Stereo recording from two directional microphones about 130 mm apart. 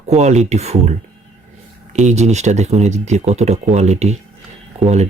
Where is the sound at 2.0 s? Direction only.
60° right (ahead or behind).